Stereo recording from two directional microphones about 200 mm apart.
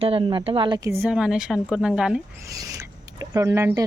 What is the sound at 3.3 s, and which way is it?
Speech, 15° right (ahead or behind).